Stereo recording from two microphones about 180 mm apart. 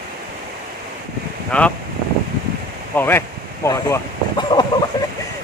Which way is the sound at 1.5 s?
5° left (ahead or behind).